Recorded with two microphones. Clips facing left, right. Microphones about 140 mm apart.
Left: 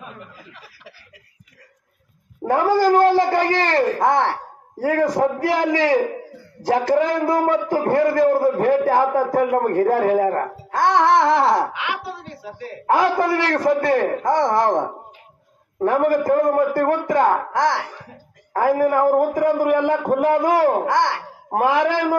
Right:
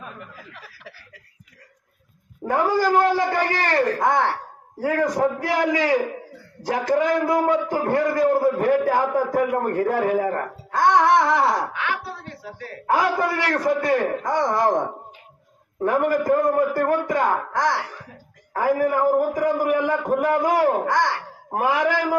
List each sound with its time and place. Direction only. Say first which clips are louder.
2.4 s a man's voice: left 4 dB; 35° left (ahead or behind)
11.8 s chuckle: left 1 dB; 15° left (ahead or behind)
13.2 s a man's voice: left 4 dB; 30° left (ahead or behind)
15.8 s speech: left 3 dB; 40° left (ahead or behind)
17.6 s a man's voice: left 3 dB; 25° left (ahead or behind)
18.7 s speech: left 2 dB; 40° left (ahead or behind)
19.3 s speech: left 3 dB; 35° left (ahead or behind)
20.9 s a man's voice: left 2 dB; 25° left (ahead or behind)